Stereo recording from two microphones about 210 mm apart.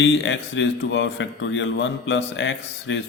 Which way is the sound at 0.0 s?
60° left (ahead or behind).